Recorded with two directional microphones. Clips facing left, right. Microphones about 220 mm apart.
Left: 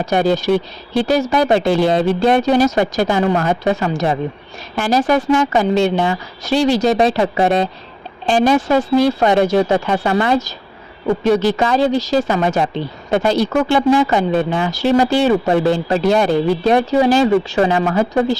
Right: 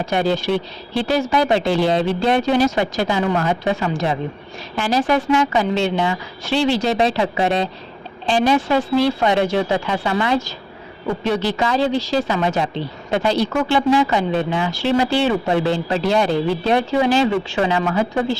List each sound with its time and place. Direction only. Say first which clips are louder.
0.0 s speech: left 4 dB; 45° left (ahead or behind)